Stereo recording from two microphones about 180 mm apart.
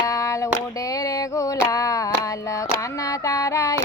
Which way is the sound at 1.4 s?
20° left (ahead or behind).